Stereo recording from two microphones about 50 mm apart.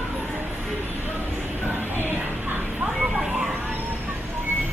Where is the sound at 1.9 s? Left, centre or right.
Right.